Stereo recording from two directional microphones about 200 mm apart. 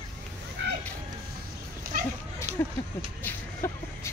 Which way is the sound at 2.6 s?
10° left (ahead or behind).